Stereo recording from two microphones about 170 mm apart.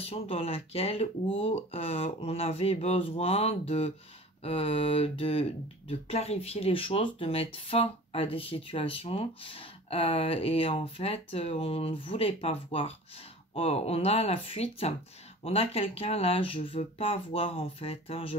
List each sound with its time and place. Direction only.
0.0 s speech: 35° left (ahead or behind)